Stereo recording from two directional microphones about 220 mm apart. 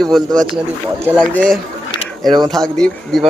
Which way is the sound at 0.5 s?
10° right (ahead or behind).